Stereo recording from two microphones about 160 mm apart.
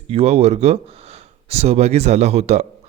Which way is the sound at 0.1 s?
40° right (ahead or behind).